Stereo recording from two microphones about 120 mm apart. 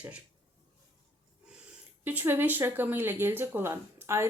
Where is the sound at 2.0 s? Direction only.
15° right (ahead or behind).